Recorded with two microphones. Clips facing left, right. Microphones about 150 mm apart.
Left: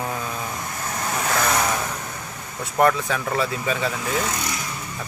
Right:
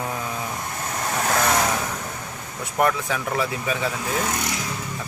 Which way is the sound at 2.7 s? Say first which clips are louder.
Left 3 dB; 10° right (ahead or behind).